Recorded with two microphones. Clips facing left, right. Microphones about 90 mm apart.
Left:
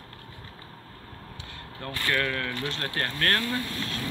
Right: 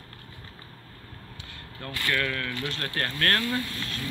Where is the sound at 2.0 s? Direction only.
25° left (ahead or behind).